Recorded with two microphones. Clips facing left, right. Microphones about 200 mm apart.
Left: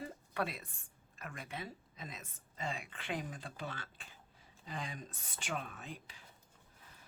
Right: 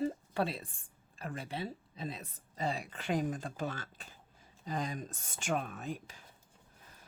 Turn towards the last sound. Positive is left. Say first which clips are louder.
# right 8 dB
turn(degrees=-45)  # may be behind; listen again after turning